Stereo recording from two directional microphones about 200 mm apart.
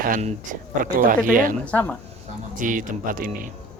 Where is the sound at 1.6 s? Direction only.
5° left (ahead or behind).